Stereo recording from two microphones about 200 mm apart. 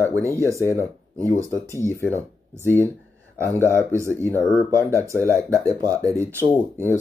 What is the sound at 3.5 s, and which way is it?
Speech, 15° left (ahead or behind).